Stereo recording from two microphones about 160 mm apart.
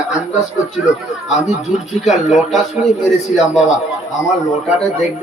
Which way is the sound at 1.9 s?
Centre (ahead or behind).